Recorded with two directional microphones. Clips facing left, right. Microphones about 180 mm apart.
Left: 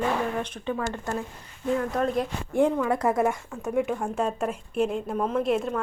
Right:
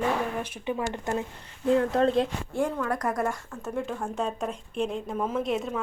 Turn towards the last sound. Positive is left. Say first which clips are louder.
# left 3 dB
turn(degrees=0)  # may be behind; listen again after turning